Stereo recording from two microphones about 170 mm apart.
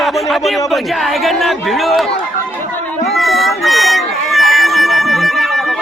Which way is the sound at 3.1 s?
Centre (ahead or behind).